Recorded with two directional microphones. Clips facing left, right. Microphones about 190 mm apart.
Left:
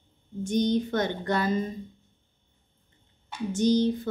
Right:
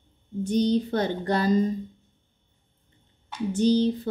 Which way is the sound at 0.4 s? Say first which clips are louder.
Right 2 dB; 35° right (ahead or behind).